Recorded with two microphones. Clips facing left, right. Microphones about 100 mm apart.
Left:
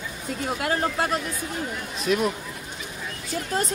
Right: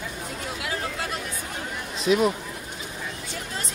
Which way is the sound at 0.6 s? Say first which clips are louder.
Left 7 dB; 45° left (ahead or behind).